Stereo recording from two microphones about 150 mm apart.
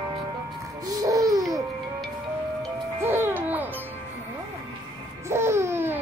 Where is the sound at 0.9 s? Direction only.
25° right (ahead or behind).